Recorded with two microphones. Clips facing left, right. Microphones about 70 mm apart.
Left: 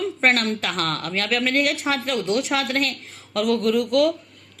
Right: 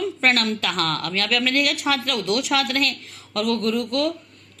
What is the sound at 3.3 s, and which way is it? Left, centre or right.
Speech, right.